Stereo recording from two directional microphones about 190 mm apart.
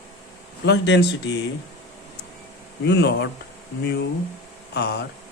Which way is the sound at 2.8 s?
65° left (ahead or behind).